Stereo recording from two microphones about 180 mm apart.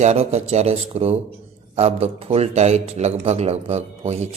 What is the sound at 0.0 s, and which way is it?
Speech, 40° right (ahead or behind).